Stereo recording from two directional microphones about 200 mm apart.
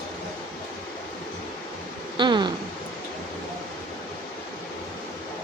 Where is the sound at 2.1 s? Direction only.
25° right (ahead or behind).